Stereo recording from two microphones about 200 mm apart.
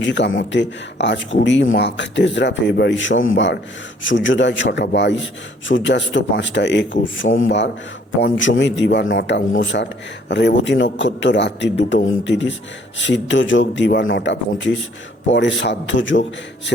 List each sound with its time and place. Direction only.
0.0 s speech: 65° left (ahead or behind)